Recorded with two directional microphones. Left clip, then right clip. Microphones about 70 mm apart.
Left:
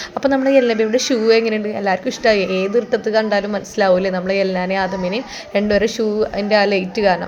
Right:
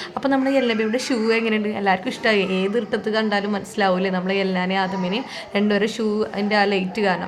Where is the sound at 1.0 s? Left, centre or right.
Centre.